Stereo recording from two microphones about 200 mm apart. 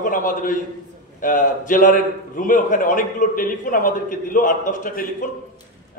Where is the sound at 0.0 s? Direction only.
40° left (ahead or behind).